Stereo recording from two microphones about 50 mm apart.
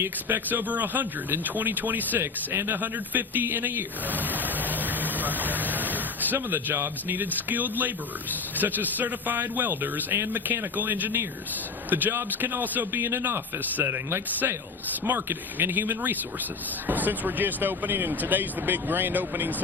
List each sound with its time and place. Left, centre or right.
0.0 s speech: right
0.4 s speech: right
2.2 s speech: right
2.6 s speech: right
14.4 s speech: right
15.0 s speech: right